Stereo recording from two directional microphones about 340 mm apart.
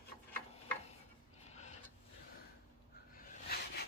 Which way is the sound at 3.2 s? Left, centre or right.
Left.